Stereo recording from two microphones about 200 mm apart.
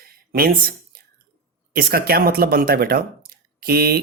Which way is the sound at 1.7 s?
50° right (ahead or behind).